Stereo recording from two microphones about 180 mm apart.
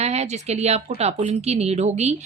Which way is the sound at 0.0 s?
35° right (ahead or behind).